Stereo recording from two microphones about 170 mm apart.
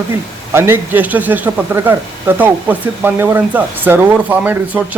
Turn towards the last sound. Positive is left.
turn(degrees=-10)  # may be behind; listen again after turning